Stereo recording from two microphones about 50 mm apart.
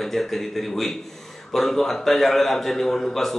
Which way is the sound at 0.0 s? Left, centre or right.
Centre.